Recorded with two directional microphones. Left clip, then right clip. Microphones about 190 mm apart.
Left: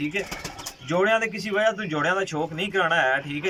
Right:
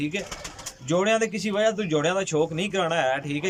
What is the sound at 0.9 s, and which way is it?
A man's voice, 15° right (ahead or behind).